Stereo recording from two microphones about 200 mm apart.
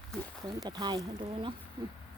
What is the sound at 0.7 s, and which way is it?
Speech, 20° right (ahead or behind).